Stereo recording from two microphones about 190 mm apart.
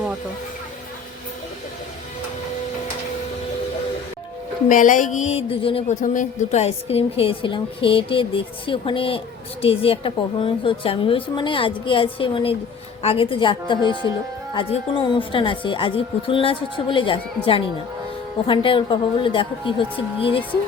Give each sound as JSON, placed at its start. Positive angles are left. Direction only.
{"t": 4.7, "sound": "speech", "side_deg": 45}